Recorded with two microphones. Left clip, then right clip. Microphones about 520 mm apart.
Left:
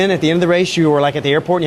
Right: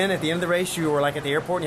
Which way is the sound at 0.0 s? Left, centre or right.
Left.